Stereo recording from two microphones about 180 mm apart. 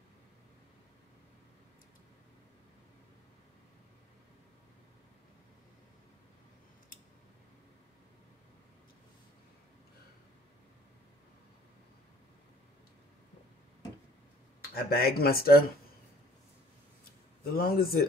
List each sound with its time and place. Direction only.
14.7 s speech: 60° left (ahead or behind)
17.5 s speech: 55° left (ahead or behind)